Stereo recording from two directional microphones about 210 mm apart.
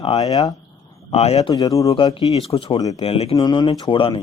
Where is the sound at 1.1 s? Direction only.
30° left (ahead or behind).